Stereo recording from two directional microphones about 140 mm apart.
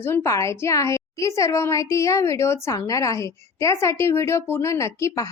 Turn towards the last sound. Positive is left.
turn(degrees=20)  # may be behind; listen again after turning